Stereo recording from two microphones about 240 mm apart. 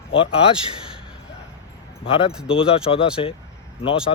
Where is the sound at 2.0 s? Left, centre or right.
Left.